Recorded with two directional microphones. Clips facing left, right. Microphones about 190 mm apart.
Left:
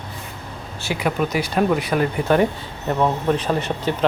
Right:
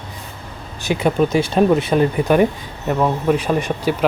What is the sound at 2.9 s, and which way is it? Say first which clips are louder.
Speech: right 2 dB; 5° right (ahead or behind).